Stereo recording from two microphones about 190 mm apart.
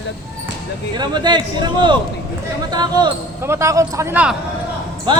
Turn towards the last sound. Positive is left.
turn(degrees=-20)  # may be behind; listen again after turning